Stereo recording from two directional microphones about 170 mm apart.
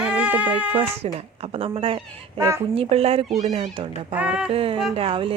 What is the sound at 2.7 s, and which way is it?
Speech, 35° right (ahead or behind).